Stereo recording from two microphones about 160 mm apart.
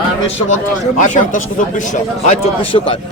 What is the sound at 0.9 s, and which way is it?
A man's voice, 55° left (ahead or behind).